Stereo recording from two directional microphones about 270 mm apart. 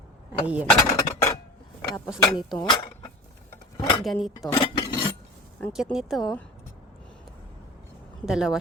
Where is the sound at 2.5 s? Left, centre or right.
Centre.